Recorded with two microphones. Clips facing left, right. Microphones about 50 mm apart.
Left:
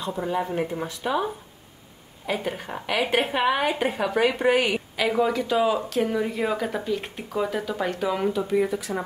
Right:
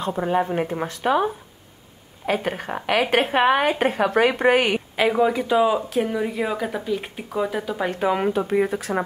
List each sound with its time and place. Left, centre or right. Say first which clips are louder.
0.0 s a woman's voice: right 5 dB; right
5.1 s speech: right 2 dB; centre
8.0 s speech: right 6 dB; right